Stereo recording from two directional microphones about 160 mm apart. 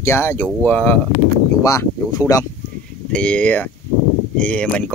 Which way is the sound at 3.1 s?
5° left (ahead or behind).